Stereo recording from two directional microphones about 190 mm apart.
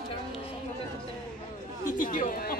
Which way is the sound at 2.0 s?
45° left (ahead or behind).